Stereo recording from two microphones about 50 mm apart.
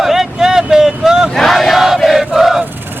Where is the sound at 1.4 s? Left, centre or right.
Centre.